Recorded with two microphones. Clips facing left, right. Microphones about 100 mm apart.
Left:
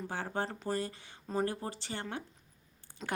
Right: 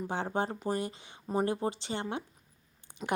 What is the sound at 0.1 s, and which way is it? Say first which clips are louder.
Speech: right 4 dB; 20° right (ahead or behind).